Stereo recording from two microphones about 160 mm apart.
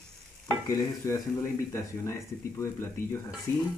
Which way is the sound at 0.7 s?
20° left (ahead or behind).